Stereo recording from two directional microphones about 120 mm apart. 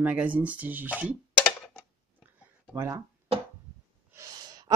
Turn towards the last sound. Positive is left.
turn(degrees=-35)  # may be behind; listen again after turning